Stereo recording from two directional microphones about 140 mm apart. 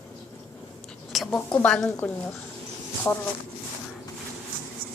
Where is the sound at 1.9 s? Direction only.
20° left (ahead or behind).